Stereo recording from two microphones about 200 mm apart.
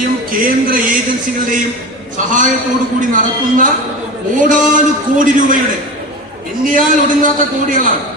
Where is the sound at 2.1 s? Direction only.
40° right (ahead or behind).